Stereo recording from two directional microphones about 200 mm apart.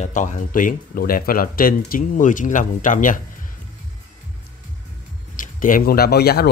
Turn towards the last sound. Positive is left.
turn(degrees=50)  # may be behind; listen again after turning